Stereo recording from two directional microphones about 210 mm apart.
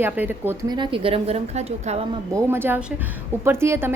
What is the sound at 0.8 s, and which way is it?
A woman's voice, 25° right (ahead or behind).